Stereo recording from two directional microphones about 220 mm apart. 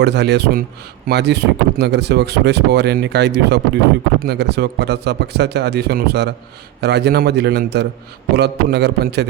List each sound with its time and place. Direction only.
0.0 s speech: 50° right (ahead or behind)